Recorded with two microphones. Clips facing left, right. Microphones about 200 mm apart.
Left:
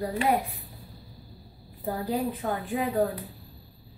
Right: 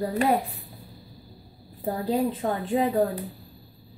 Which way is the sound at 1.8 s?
25° right (ahead or behind).